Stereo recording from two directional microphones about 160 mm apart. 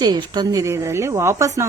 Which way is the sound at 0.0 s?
25° right (ahead or behind).